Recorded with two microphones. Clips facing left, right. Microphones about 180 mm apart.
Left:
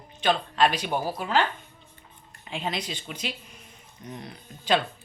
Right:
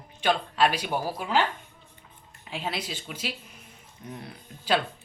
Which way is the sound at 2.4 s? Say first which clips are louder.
Left 1 dB; 5° right (ahead or behind).